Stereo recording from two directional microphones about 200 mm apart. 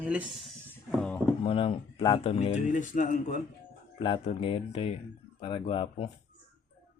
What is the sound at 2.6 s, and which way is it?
Speech, 40° left (ahead or behind).